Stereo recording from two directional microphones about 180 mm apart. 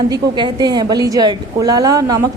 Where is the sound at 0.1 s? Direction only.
25° right (ahead or behind).